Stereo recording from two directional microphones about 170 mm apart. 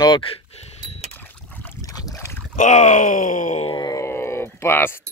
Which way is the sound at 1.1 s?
10° left (ahead or behind).